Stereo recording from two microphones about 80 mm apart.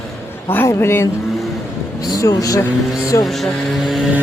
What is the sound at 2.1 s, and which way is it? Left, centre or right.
Speech, left.